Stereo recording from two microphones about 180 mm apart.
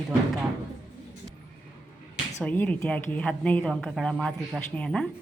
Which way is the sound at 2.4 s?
10° left (ahead or behind).